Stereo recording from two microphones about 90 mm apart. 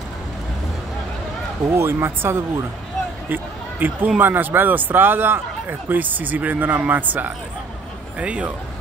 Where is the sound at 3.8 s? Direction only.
20° right (ahead or behind).